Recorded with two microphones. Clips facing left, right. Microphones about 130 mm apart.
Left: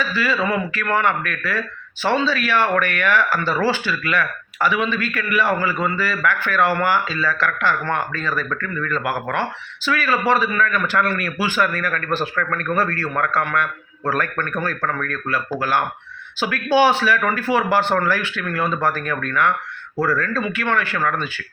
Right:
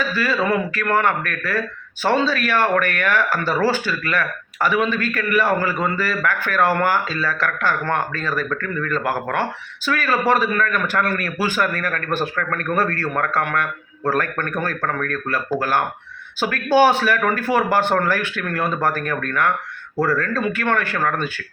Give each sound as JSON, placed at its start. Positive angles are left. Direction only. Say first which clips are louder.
{"t": 0.0, "sound": "speech", "louder": "even", "side_deg": -45}
{"t": 16.4, "sound": "speech", "louder": "right 1 dB", "side_deg": -45}